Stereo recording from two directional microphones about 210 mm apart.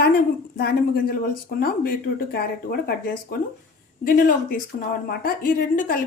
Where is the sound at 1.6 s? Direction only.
45° left (ahead or behind).